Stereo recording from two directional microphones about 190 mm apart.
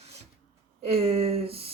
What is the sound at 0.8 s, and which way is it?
Speech, 35° right (ahead or behind).